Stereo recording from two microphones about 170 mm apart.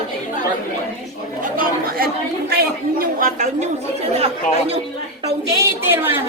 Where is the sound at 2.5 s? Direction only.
65° right (ahead or behind); by 3.7 s 45° right (ahead or behind).